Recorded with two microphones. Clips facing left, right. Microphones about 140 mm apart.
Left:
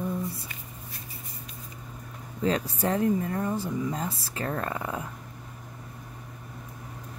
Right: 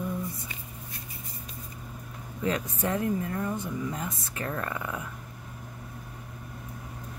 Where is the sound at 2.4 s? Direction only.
30° left (ahead or behind).